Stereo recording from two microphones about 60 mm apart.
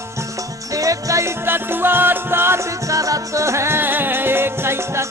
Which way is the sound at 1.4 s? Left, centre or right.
Right.